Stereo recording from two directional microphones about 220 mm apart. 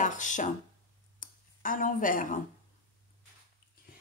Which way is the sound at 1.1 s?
35° left (ahead or behind).